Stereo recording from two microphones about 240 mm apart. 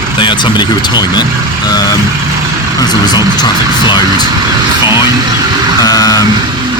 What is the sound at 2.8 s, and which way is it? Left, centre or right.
Speech, centre.